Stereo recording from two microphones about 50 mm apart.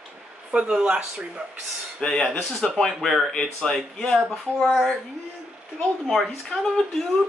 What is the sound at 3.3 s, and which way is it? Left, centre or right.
Speech, centre.